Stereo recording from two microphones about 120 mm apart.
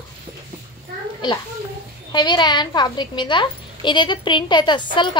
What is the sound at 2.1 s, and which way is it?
A woman's voice, 40° left (ahead or behind).